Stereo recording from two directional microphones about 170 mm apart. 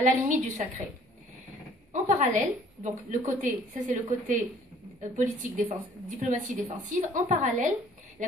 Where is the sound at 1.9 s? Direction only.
45° right (ahead or behind).